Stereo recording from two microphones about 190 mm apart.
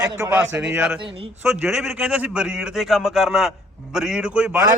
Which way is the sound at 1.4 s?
10° right (ahead or behind).